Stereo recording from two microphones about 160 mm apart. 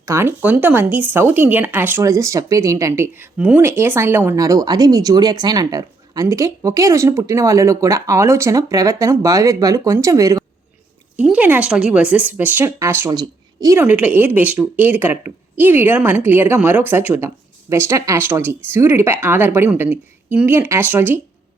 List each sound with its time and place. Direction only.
0.0 s speech: 15° right (ahead or behind)
11.2 s a woman's voice: 10° right (ahead or behind)
13.7 s speech: 10° right (ahead or behind)